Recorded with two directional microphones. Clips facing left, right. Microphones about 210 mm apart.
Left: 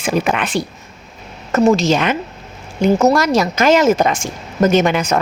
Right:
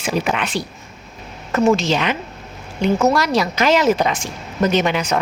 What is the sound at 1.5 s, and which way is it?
A woman's voice, 40° left (ahead or behind).